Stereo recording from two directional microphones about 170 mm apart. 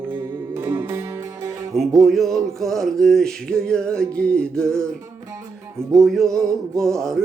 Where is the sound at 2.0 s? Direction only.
Centre (ahead or behind).